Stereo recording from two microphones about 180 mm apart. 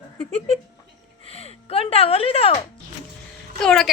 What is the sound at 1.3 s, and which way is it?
Speech, 35° left (ahead or behind).